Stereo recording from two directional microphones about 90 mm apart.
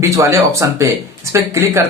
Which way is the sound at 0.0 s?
35° right (ahead or behind).